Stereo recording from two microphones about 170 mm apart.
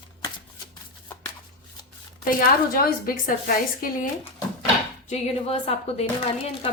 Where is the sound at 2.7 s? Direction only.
60° left (ahead or behind).